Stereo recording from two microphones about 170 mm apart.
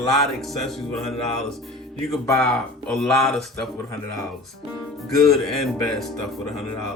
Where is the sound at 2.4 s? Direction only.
Centre (ahead or behind).